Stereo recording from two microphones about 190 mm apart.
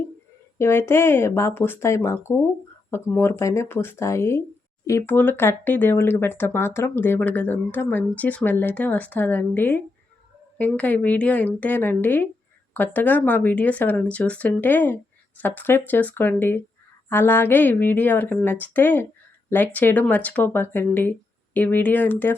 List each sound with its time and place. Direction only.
0.6 s speech: 10° left (ahead or behind)